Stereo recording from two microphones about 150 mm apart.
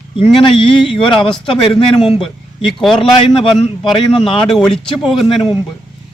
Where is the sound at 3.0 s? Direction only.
35° left (ahead or behind).